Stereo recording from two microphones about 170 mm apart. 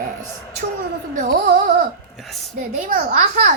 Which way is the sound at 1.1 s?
50° right (ahead or behind).